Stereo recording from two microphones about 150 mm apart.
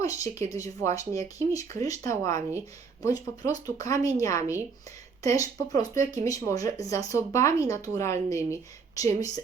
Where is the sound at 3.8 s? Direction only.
20° left (ahead or behind).